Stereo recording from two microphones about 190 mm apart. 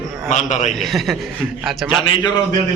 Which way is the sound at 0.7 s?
Centre (ahead or behind).